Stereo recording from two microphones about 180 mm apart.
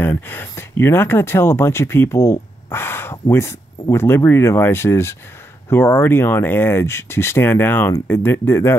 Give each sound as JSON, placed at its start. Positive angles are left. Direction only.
{"t": 0.0, "sound": "speech", "side_deg": 10}